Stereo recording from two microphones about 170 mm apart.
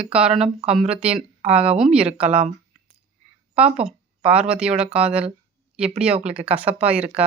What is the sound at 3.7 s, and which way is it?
Speech, 5° right (ahead or behind).